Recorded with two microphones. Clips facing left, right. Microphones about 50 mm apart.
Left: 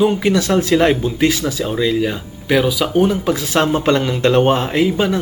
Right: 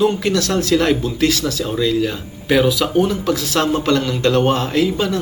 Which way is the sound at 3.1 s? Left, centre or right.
Left.